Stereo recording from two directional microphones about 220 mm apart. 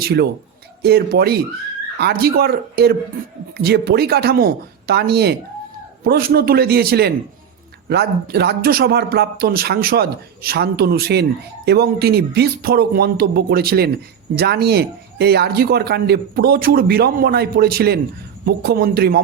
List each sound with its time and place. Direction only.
0.0 s speech: 45° right (ahead or behind)